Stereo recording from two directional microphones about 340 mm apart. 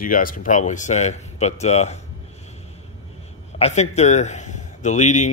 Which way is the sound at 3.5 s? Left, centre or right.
Centre.